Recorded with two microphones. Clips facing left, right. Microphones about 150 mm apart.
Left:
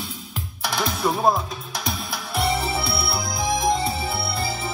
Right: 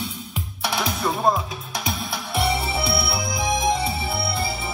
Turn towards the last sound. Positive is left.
turn(degrees=0)  # may be behind; listen again after turning